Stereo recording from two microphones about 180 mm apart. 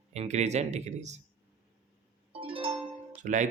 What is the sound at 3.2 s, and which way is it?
Speech, 45° right (ahead or behind).